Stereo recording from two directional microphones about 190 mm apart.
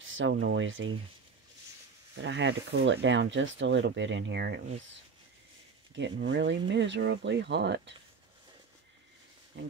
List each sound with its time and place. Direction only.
0.0 s speech: 85° right
2.1 s speech: 70° right (ahead or behind)
5.9 s speech: 70° right (ahead or behind)
9.6 s speech: 80° right